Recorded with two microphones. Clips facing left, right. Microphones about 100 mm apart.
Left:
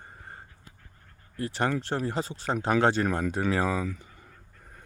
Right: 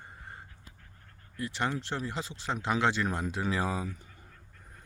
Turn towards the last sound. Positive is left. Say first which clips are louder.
# left 5 dB
turn(degrees=85)